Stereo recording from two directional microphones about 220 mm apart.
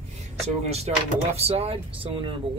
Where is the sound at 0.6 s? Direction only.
30° right (ahead or behind).